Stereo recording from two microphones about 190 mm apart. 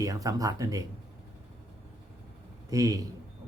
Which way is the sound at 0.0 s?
20° right (ahead or behind).